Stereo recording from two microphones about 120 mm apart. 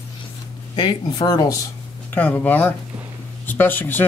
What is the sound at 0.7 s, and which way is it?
Speech, 35° left (ahead or behind).